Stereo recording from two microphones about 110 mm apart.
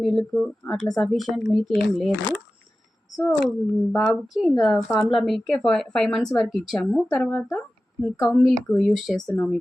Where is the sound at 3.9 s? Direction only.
Centre (ahead or behind).